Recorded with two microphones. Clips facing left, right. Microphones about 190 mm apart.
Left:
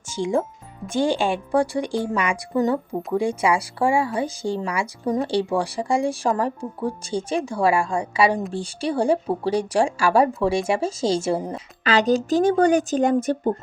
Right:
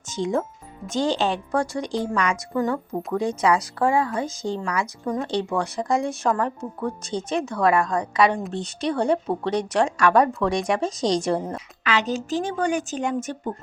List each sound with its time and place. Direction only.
0.1 s speech: 10° left (ahead or behind)
5.7 s speech: 10° left (ahead or behind)
11.8 s speech: 35° left (ahead or behind)